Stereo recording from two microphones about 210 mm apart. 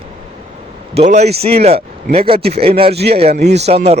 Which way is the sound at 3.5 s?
30° right (ahead or behind).